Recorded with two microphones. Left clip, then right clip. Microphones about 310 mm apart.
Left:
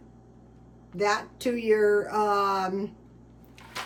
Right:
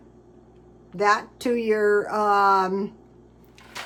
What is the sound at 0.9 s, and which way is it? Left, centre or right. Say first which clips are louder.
A woman's voice: right 5 dB; centre.